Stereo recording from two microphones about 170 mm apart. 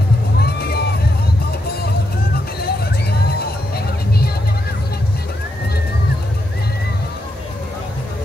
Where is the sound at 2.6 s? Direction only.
70° left (ahead or behind).